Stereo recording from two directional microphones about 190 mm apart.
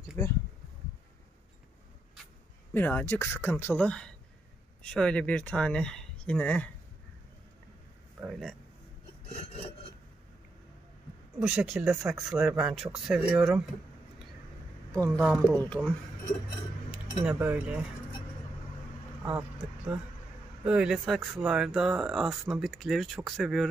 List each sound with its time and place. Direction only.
0.2 s speech: 20° left (ahead or behind)
2.7 s speech: 10° left (ahead or behind)
8.2 s speech: centre (ahead or behind)
11.3 s speech: 5° right (ahead or behind)
15.0 s speech: centre (ahead or behind)
16.9 s speech: 5° right (ahead or behind)
19.2 s speech: 5° right (ahead or behind)